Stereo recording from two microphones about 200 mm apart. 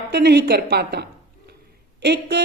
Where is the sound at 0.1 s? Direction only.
55° right (ahead or behind).